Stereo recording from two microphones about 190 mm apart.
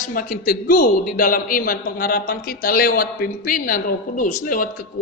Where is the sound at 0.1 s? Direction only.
50° left (ahead or behind).